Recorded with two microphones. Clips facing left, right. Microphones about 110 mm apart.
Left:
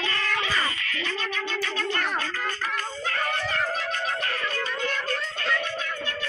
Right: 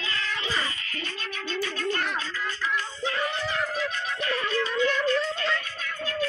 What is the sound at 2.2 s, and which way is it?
Music, 55° left (ahead or behind).